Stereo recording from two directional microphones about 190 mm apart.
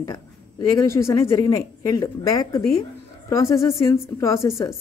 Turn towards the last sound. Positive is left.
turn(degrees=15)  # may be behind; listen again after turning